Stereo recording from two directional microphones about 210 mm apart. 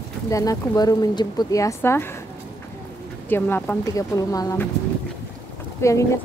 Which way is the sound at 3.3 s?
10° left (ahead or behind).